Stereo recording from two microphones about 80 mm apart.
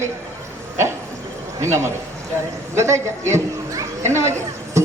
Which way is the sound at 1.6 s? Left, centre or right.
Right.